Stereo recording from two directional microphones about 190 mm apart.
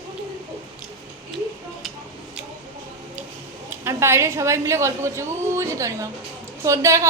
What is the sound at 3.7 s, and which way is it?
A woman's voice, 15° right (ahead or behind).